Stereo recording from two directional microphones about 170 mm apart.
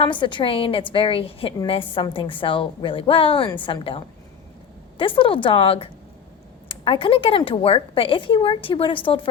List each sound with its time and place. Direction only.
0.0 s a woman's voice: 30° left (ahead or behind)